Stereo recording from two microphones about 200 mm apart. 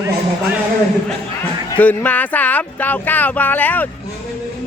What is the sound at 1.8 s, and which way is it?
Speech, 5° left (ahead or behind).